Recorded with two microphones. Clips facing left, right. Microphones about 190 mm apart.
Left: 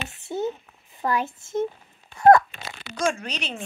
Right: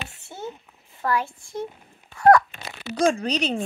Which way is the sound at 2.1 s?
25° left (ahead or behind).